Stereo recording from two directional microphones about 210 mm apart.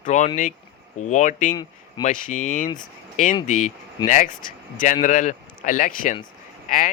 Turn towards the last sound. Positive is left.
turn(degrees=40)  # may be behind; listen again after turning